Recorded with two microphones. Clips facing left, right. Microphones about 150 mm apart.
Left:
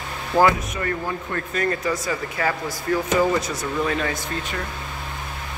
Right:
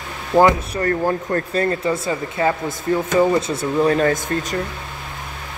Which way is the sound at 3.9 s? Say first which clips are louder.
Right 8 dB; 45° right (ahead or behind).